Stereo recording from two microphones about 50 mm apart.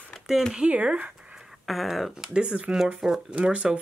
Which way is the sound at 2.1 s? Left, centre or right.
Centre.